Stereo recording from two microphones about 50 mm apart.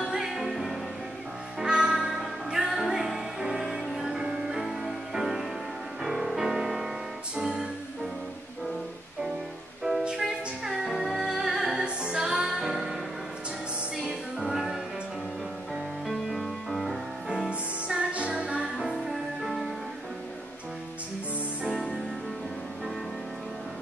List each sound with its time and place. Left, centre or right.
0.0 s music: centre
1.6 s music: centre
10.2 s music: centre
13.9 s music: centre
16.1 s music: centre
17.5 s music: right
19.4 s music: centre
21.6 s music: centre